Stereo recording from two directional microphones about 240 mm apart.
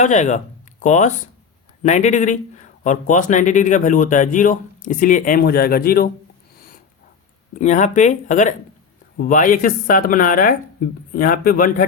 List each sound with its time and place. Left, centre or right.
0.0 s speech: left
7.6 s speech: left